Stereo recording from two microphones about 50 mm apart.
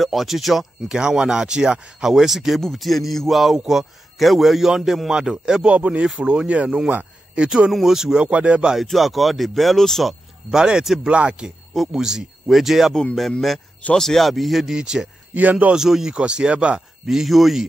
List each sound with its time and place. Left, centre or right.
0.0 s a man's voice: centre
0.8 s a man's voice: centre
5.4 s speech: centre
7.7 s speech: centre
8.7 s a man's voice: centre
10.5 s speech: centre
11.1 s speech: right
11.7 s speech: centre
13.9 s a man's voice: centre
14.8 s speech: centre
17.1 s a man's voice: centre